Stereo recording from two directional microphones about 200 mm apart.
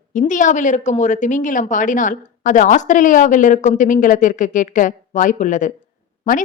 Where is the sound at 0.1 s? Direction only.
40° left (ahead or behind).